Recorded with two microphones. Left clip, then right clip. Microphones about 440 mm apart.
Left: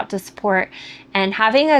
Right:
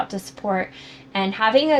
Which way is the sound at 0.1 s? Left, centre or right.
Left.